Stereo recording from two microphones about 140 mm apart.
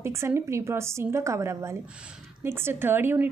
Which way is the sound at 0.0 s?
20° right (ahead or behind).